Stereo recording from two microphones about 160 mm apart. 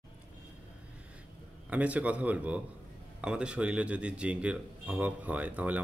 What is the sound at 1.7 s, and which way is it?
Speech, 10° right (ahead or behind).